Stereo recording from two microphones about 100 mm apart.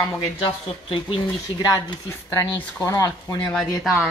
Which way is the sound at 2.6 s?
25° left (ahead or behind).